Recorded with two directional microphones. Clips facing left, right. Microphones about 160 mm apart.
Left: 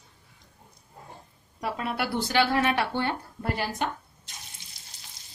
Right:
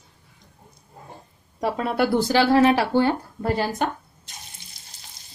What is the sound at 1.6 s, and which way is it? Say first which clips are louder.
Speech: right 8 dB; 35° right (ahead or behind).